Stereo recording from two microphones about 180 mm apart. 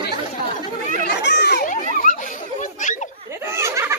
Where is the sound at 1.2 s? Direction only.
70° left (ahead or behind).